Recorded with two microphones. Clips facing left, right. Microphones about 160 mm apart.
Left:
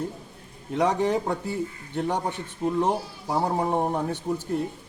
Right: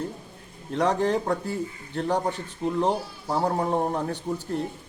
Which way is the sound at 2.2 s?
10° left (ahead or behind).